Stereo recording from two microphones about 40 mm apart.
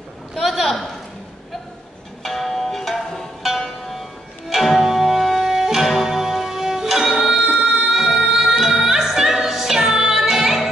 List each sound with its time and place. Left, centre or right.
0.4 s a man's voice: centre
2.2 s music: centre
4.5 s music: centre
7.3 s music: right
7.9 s music: centre